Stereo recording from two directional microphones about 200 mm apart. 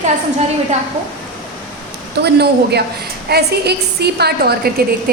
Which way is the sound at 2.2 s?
55° right (ahead or behind).